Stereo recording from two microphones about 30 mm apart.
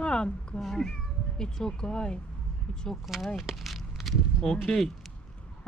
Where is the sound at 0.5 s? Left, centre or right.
Left.